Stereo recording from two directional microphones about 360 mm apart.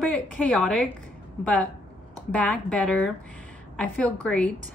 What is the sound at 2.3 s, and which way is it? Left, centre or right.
A woman's voice, centre.